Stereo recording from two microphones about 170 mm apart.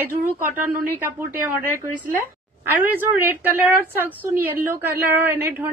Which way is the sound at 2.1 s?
10° right (ahead or behind).